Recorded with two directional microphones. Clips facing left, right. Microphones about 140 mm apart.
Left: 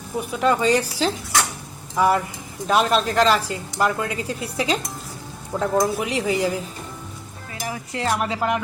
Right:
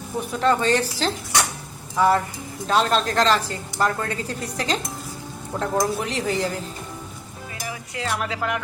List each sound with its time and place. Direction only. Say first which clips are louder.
0.3 s a woman's voice: left 1 dB; 10° left (ahead or behind)
7.7 s speech: left 5 dB; 40° left (ahead or behind)
8.1 s speech: left 3 dB; 25° left (ahead or behind)